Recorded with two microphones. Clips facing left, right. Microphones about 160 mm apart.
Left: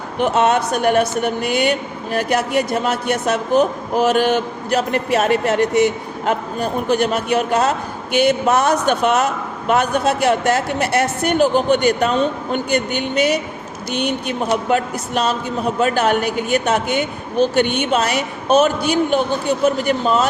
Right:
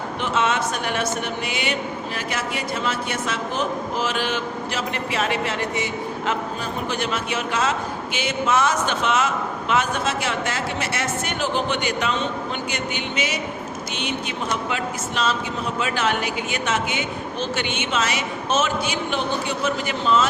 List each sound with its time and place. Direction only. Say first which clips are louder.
0.2 s speech: left 7 dB; 45° left (ahead or behind); by 3.4 s 60° left (ahead or behind)
3.5 s a man's voice: left 11 dB; 40° left (ahead or behind)
8.1 s speech: left 15 dB; 60° left (ahead or behind)
8.4 s speech: left 5 dB; 40° left (ahead or behind)